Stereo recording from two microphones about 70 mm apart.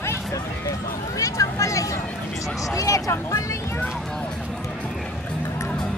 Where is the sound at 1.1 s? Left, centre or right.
Left.